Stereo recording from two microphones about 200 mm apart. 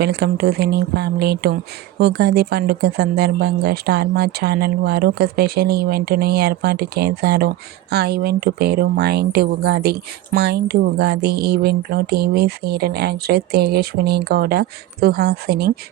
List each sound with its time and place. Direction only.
0.0 s speech: 55° right (ahead or behind)